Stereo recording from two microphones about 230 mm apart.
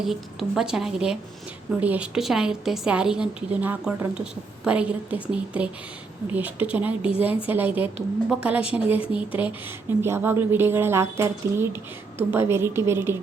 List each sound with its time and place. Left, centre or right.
0.0 s a woman's voice: centre